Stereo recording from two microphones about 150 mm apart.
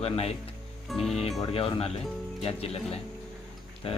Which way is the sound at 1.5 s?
40° left (ahead or behind).